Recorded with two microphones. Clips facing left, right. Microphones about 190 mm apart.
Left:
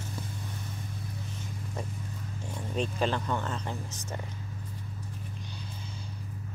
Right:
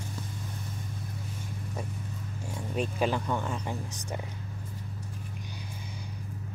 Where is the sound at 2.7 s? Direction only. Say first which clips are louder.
Right 1 dB; 10° right (ahead or behind).